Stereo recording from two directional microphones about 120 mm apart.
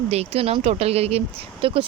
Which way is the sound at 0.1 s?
60° right (ahead or behind).